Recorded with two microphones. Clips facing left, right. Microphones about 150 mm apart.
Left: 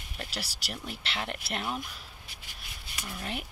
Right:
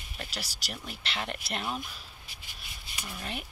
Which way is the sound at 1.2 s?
5° left (ahead or behind).